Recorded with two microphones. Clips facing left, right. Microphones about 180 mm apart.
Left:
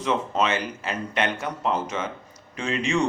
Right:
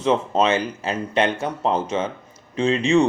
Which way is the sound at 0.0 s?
30° right (ahead or behind).